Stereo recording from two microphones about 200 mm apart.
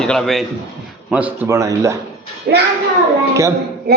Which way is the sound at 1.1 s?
10° right (ahead or behind).